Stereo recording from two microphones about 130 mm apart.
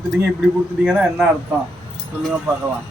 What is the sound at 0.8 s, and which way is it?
Speech, 10° right (ahead or behind).